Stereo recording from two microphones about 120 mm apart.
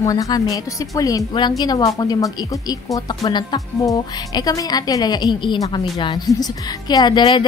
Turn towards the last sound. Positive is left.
turn(degrees=40)  # may be behind; listen again after turning